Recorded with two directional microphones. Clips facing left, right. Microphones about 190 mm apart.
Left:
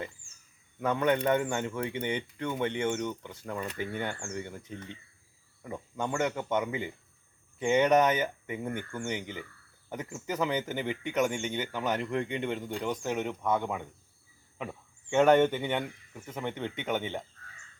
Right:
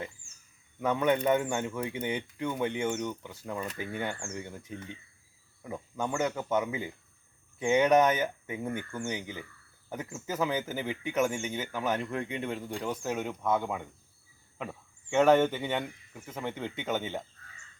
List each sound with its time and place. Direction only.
0.8 s speech: 10° right (ahead or behind)